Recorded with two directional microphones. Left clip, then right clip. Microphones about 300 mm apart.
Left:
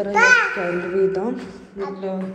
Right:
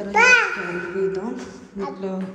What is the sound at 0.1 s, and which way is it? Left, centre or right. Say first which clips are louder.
Speech: even; right.